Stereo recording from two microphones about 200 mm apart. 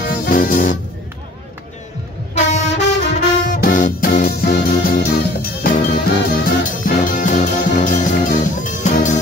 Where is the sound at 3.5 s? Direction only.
40° left (ahead or behind).